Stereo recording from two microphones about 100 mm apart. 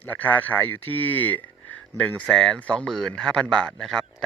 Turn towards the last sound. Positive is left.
turn(degrees=5)  # may be behind; listen again after turning